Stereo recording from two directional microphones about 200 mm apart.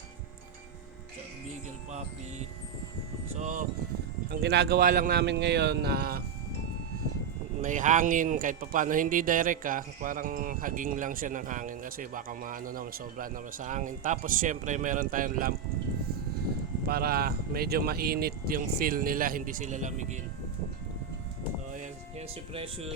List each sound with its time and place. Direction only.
3.3 s speech: 40° right (ahead or behind)
4.3 s speech: 60° right (ahead or behind)
7.6 s speech: 40° right (ahead or behind)
16.8 s speech: 50° right (ahead or behind)
22.5 s speech: 30° right (ahead or behind)